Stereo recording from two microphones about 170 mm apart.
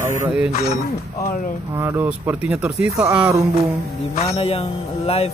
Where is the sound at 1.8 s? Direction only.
10° right (ahead or behind).